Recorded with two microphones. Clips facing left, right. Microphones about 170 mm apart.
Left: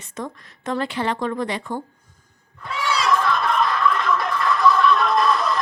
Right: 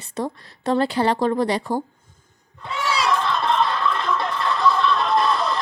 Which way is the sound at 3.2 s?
25° right (ahead or behind).